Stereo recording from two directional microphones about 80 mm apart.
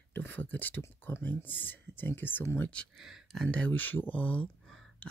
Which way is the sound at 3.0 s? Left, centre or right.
Centre.